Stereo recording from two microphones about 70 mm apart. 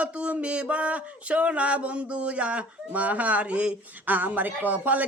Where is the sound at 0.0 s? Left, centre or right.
Centre.